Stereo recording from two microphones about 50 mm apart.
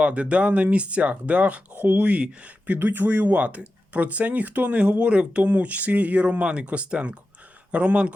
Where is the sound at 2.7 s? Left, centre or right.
Right.